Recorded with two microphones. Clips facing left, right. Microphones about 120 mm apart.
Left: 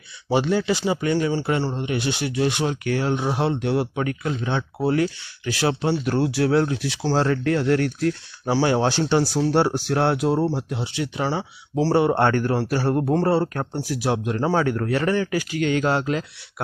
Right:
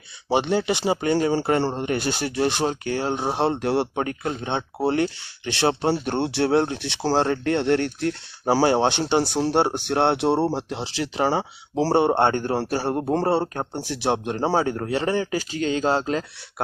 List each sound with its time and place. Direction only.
0.3 s speech: 25° right (ahead or behind)
0.9 s speech: 35° right (ahead or behind)
8.4 s speech: 40° right (ahead or behind)
8.8 s speech: 20° right (ahead or behind)
10.8 s speech: 90° right
11.2 s speech: 45° right (ahead or behind)
11.9 s speech: 25° right (ahead or behind)